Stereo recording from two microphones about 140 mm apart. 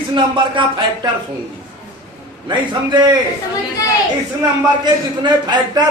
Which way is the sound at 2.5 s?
30° right (ahead or behind).